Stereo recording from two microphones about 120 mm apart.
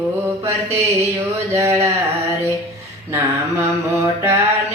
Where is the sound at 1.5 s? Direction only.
25° right (ahead or behind).